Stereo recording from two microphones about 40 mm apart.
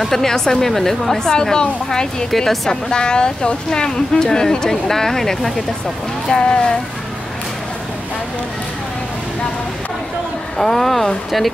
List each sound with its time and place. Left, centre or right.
0.0 s speech: centre
2.3 s speech: centre
2.7 s speech: centre
6.2 s speech: left
10.6 s speech: centre